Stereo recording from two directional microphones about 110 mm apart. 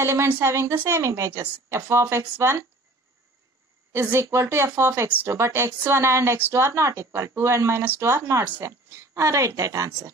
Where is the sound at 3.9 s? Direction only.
25° right (ahead or behind).